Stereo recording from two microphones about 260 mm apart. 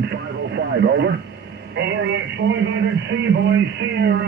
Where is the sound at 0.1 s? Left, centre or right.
Right.